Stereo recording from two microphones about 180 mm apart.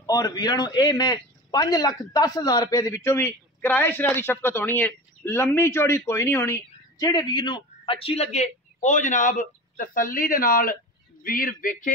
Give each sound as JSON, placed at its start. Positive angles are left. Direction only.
{"t": 0.0, "sound": "a man's voice", "side_deg": 20}